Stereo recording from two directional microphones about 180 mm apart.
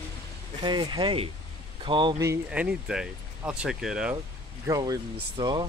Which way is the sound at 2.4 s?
5° right (ahead or behind).